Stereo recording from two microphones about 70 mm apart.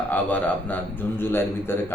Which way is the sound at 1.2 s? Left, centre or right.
Left.